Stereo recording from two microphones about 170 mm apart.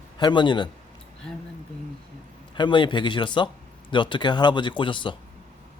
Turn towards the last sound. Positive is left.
turn(degrees=30)  # may be behind; listen again after turning